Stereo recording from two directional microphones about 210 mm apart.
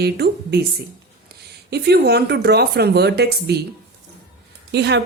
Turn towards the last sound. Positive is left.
turn(degrees=-55)  # may be behind; listen again after turning